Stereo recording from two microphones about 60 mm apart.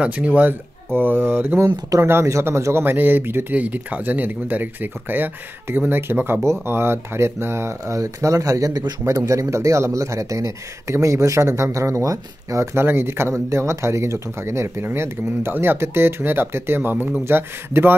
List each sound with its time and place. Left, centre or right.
0.0 s speech: right
8.0 s speech: right
12.7 s speech: right